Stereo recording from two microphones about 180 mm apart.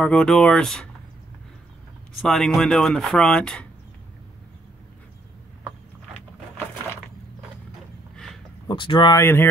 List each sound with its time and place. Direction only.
0.0 s speech: 5° left (ahead or behind)
2.2 s speech: 5° left (ahead or behind)
8.6 s speech: 25° left (ahead or behind)
9.1 s speech: 15° left (ahead or behind)